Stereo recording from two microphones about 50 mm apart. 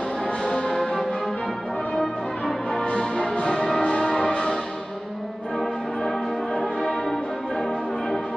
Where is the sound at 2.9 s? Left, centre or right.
Centre.